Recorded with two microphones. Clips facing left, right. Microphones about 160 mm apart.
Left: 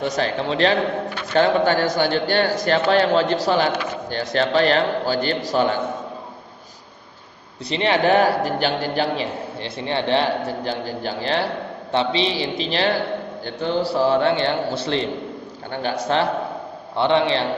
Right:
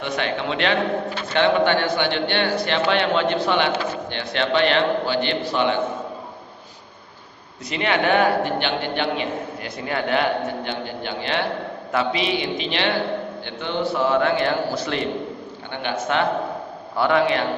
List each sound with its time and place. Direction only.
0.0 s a man's voice: 35° left (ahead or behind)
7.7 s a man's voice: 30° left (ahead or behind)